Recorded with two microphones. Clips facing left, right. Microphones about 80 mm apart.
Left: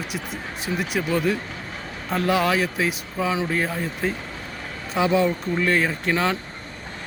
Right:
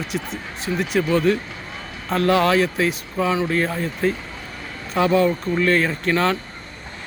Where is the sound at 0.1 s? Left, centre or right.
Centre.